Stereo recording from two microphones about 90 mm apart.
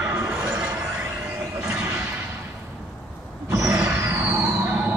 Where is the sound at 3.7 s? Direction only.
30° right (ahead or behind).